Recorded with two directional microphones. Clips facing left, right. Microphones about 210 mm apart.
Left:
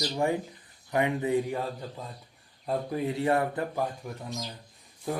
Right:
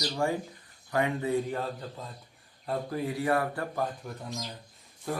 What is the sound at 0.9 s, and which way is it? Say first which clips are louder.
Speech: left 2 dB; 20° left (ahead or behind).